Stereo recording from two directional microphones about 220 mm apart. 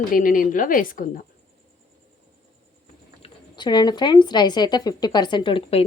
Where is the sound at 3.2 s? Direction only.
20° left (ahead or behind).